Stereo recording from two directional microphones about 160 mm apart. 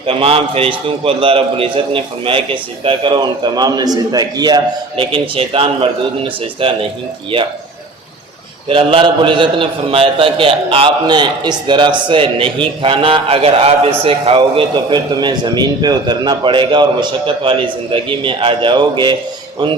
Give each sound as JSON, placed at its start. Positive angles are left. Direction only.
{"t": 0.0, "sound": "a man's voice", "side_deg": -35}
{"t": 8.7, "sound": "a man's voice", "side_deg": -30}